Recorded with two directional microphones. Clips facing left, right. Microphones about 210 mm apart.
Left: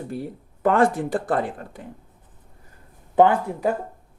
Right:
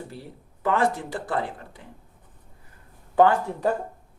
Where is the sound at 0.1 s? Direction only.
50° left (ahead or behind).